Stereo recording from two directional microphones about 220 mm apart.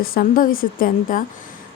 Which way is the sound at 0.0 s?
40° left (ahead or behind).